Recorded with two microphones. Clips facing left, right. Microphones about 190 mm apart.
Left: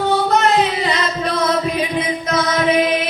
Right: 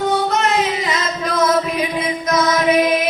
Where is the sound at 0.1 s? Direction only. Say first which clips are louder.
Left 2 dB; 35° left (ahead or behind).